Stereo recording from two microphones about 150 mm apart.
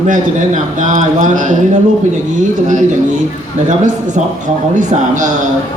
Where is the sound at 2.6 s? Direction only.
55° right (ahead or behind).